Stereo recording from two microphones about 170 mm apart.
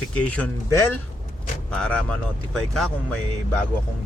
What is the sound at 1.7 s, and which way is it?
Speech, 5° left (ahead or behind).